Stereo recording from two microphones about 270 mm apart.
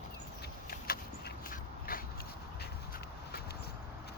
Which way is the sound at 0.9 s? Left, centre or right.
Left.